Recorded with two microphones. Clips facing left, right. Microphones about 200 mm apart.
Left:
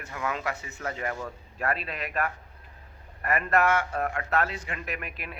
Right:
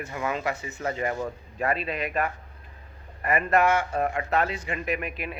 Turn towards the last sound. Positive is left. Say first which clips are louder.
# right 7 dB
turn(degrees=0)  # may be behind; listen again after turning